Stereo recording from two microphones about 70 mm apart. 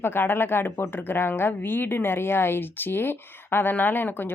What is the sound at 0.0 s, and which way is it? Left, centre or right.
Speech, left.